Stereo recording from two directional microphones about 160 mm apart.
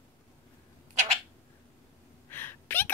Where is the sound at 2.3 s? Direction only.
15° left (ahead or behind).